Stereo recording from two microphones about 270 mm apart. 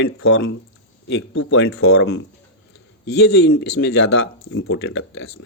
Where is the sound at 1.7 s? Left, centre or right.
Left.